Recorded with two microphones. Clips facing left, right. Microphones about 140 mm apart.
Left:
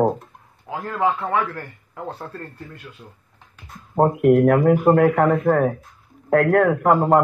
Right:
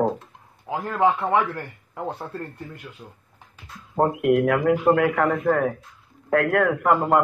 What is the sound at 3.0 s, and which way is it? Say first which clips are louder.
Speech: right 1 dB; 25° right (ahead or behind).